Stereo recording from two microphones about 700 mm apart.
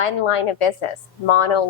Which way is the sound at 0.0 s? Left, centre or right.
Left.